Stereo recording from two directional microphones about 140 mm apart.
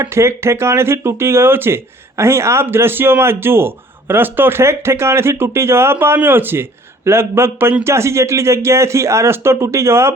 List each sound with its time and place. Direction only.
0.0 s speech: 20° right (ahead or behind)